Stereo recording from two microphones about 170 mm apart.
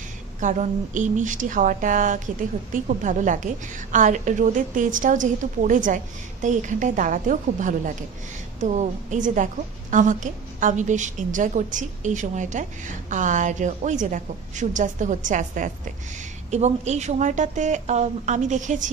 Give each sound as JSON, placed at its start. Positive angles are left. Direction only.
{"t": 0.4, "sound": "a woman's voice", "side_deg": -45}